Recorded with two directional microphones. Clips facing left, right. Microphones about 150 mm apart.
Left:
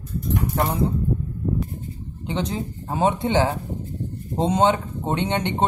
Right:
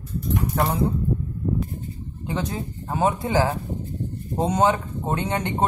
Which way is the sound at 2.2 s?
20° left (ahead or behind).